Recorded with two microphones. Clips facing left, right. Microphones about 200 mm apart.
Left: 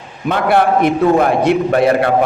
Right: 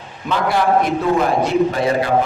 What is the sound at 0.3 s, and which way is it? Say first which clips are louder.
A man's voice: left 4 dB; 60° left (ahead or behind).